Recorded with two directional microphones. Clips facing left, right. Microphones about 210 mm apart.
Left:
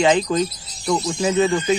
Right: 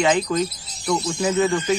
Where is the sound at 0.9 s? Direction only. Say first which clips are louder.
Left 1 dB; 15° left (ahead or behind).